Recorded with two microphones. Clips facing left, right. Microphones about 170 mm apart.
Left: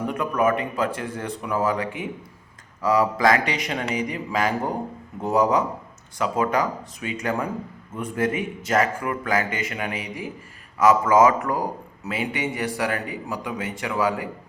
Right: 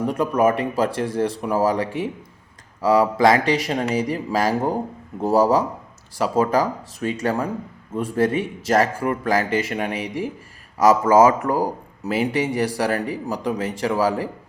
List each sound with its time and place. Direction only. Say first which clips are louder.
0.1 s a man's voice: right 3 dB; 35° right (ahead or behind)